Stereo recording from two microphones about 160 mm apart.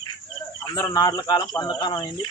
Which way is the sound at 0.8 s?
25° left (ahead or behind).